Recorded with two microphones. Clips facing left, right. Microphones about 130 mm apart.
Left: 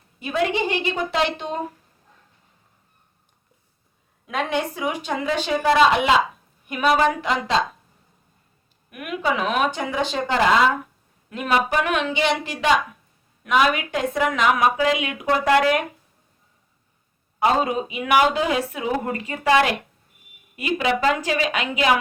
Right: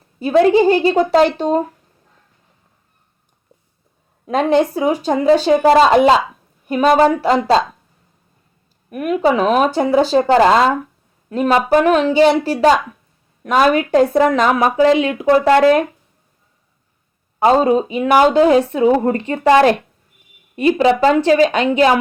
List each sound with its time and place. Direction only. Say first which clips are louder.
0.2 s a woman's voice: right 11 dB; 35° right (ahead or behind)
4.3 s a woman's voice: right 10 dB; 35° right (ahead or behind)
8.9 s a woman's voice: right 9 dB; 35° right (ahead or behind)
17.4 s a woman's voice: right 8 dB; 35° right (ahead or behind)